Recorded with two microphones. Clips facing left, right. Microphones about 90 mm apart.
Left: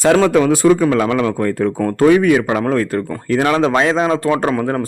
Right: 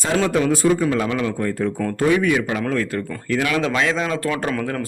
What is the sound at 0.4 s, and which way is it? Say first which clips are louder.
A man's voice: left 6 dB; 70° left (ahead or behind).